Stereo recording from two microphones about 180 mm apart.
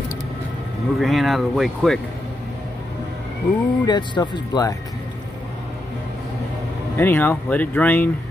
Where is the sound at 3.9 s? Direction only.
25° left (ahead or behind).